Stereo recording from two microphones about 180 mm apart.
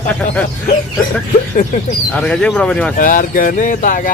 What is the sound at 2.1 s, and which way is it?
Speech, 5° left (ahead or behind).